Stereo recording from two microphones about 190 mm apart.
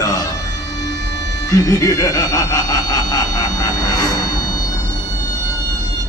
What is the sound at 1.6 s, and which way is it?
Snicker, 20° left (ahead or behind).